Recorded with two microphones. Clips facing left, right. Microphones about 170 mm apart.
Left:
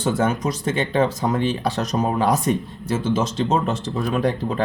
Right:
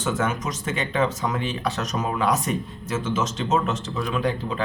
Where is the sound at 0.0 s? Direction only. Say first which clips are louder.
Left 4 dB; 35° left (ahead or behind).